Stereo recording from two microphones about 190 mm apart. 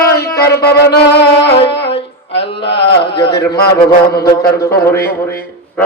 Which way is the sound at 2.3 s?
65° left (ahead or behind).